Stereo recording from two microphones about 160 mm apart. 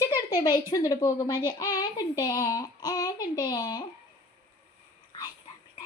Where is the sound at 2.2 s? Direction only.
25° left (ahead or behind).